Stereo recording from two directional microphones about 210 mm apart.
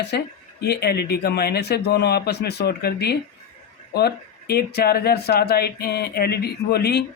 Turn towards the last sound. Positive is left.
turn(degrees=50)  # may be behind; listen again after turning